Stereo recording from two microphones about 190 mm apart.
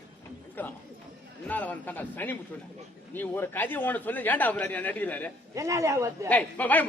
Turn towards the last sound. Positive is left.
turn(degrees=10)  # may be behind; listen again after turning